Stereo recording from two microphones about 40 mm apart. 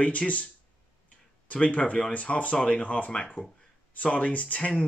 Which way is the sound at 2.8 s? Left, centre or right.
Left.